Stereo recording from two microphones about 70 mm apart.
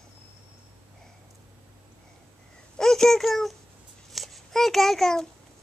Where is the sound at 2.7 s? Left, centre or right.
Centre.